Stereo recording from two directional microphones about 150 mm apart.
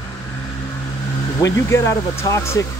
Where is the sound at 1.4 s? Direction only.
20° left (ahead or behind).